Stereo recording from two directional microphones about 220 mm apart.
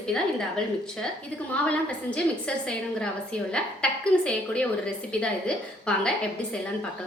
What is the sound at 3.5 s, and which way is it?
A woman's voice, 5° left (ahead or behind).